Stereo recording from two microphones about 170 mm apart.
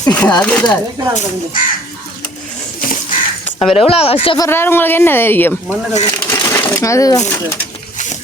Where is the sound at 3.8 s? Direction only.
35° left (ahead or behind).